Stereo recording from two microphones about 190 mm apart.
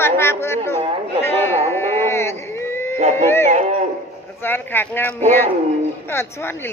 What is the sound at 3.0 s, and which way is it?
Speech, 40° right (ahead or behind).